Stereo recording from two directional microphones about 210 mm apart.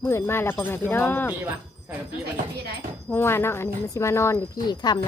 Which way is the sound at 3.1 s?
10° left (ahead or behind).